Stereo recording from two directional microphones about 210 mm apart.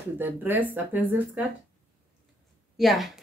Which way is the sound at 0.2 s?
10° right (ahead or behind).